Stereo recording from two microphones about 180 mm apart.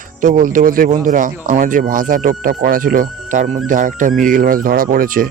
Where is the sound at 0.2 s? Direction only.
45° right (ahead or behind).